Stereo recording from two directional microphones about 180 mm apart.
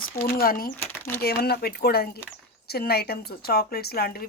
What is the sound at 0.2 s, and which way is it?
Speech, 55° left (ahead or behind).